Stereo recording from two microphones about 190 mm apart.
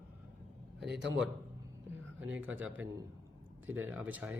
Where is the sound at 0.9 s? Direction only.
65° right (ahead or behind).